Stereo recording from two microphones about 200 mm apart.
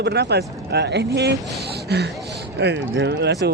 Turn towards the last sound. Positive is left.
turn(degrees=-55)  # may be behind; listen again after turning